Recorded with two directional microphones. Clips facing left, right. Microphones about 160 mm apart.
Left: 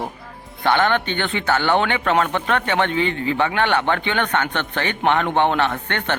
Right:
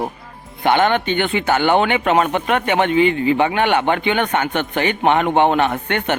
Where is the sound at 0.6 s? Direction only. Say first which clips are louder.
Right 3 dB; 15° right (ahead or behind).